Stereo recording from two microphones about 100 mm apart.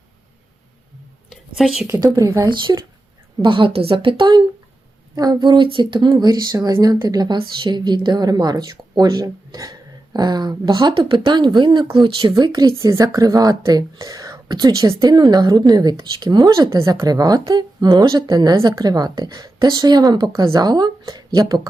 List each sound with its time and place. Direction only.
1.3 s a sound: centre (ahead or behind)
1.9 s speech: 30° right (ahead or behind)
2.5 s a woman's voice: 50° right (ahead or behind)
7.3 s a woman's voice: 50° right (ahead or behind)
12.9 s speech: 30° right (ahead or behind)
20.1 s a woman's voice: 50° right (ahead or behind)
20.4 s a woman's voice: 35° right (ahead or behind)